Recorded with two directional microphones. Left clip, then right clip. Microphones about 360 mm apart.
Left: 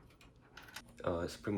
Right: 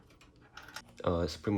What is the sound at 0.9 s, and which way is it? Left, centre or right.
Speech, right.